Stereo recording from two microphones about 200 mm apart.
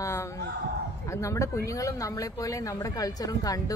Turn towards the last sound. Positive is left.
turn(degrees=15)  # may be behind; listen again after turning